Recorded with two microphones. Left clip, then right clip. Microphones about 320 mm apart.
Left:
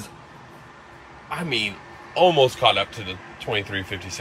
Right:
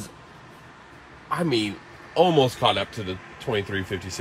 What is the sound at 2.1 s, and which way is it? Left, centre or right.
Speech, right.